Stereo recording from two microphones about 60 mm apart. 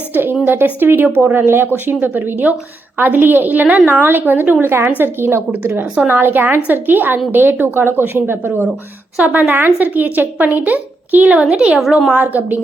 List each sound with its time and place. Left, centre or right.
0.1 s a woman's voice: right
11.3 s a woman's voice: centre
12.1 s speech: right